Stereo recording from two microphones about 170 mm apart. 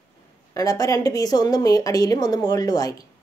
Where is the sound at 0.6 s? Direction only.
20° left (ahead or behind).